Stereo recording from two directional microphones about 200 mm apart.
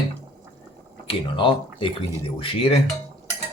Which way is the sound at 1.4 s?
25° left (ahead or behind).